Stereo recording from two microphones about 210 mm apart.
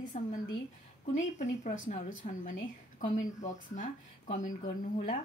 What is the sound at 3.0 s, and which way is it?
A woman's voice, 40° left (ahead or behind).